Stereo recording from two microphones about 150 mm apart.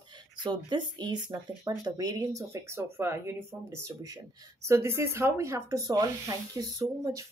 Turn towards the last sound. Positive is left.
turn(degrees=-20)  # may be behind; listen again after turning